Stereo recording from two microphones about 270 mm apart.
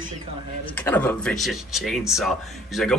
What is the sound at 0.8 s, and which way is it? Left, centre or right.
Speech, centre.